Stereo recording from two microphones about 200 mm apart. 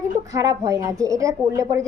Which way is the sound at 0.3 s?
15° right (ahead or behind).